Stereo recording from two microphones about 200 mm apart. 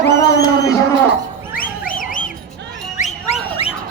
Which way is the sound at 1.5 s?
45° left (ahead or behind).